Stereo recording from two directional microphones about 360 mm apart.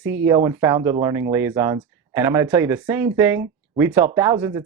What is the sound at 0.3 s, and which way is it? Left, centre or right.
Speech, centre.